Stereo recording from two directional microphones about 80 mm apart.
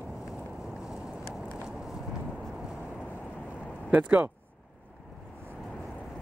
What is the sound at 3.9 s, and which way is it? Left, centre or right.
Speech, right.